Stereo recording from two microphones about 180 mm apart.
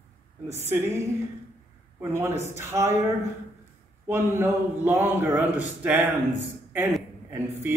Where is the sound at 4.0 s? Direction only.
15° right (ahead or behind).